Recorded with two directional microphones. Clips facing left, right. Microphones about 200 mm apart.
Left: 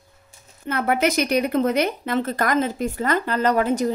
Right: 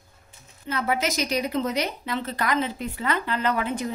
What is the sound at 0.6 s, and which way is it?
A woman's voice, 55° left (ahead or behind).